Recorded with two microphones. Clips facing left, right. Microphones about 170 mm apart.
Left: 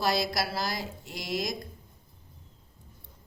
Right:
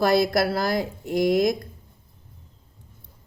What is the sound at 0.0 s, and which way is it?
A woman's voice, 55° right (ahead or behind).